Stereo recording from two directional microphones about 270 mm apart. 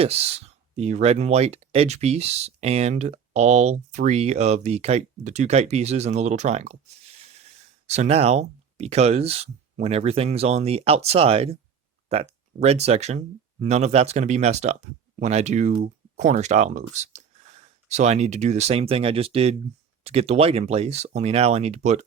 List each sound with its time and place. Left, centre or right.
0.0 s speech: right